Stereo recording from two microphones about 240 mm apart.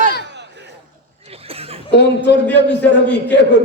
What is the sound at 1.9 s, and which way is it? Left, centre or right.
Speech, left.